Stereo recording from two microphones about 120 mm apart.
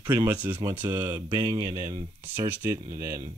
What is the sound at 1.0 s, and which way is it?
Speech, 25° right (ahead or behind).